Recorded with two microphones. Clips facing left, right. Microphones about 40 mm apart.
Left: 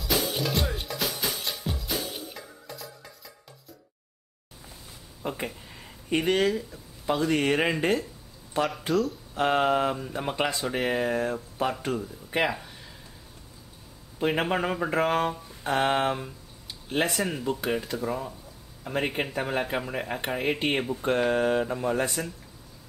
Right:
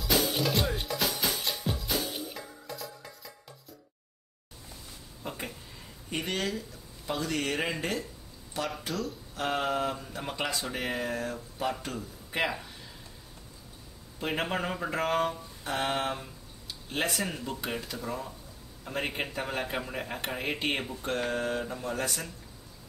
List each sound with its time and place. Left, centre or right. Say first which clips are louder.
0.0 s music: even; centre
5.2 s a man's voice: left 6 dB; centre
9.3 s a sound: left 7 dB; left
9.6 s speech: left 6 dB; centre
12.3 s speech: left 4 dB; centre
14.2 s speech: left 5 dB; centre
15.8 s speech: left 6 dB; left
16.1 s speech: left 5 dB; centre
21.0 s speech: left 9 dB; left